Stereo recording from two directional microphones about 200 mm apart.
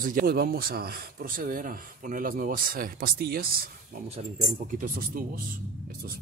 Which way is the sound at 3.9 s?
35° right (ahead or behind).